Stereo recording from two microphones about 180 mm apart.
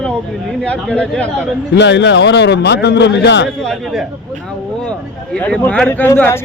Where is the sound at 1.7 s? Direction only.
75° left (ahead or behind).